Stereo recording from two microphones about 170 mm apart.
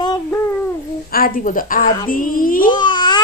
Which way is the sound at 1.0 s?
60° left (ahead or behind).